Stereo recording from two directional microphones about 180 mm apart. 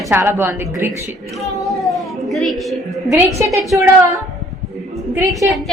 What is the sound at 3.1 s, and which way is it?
Speech, 15° right (ahead or behind).